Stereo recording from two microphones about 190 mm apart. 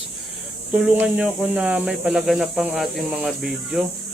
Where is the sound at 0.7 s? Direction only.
5° right (ahead or behind).